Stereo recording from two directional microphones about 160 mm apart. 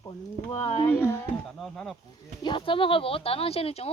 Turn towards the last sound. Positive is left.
turn(degrees=40)  # may be behind; listen again after turning